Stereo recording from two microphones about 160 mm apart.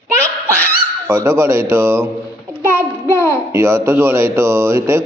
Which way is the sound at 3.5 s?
15° right (ahead or behind).